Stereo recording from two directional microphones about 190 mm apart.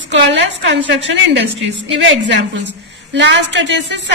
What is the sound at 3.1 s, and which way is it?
Speech, 70° right (ahead or behind).